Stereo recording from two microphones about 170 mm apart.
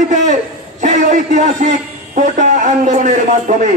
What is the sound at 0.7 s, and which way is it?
Music, 50° right (ahead or behind).